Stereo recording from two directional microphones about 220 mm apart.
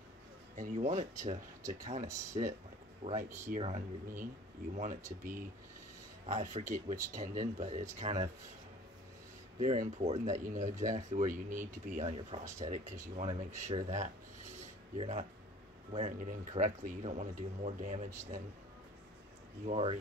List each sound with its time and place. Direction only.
0.6 s speech: 35° right (ahead or behind)
9.6 s speech: 30° right (ahead or behind)
13.8 s a sound: 35° right (ahead or behind)
15.0 s speech: 30° right (ahead or behind)
19.6 s speech: 25° right (ahead or behind)